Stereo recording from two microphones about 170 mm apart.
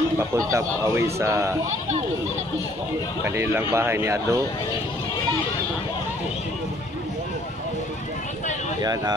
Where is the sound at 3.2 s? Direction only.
15° right (ahead or behind).